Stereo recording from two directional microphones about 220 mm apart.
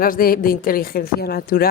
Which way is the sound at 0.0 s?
40° left (ahead or behind).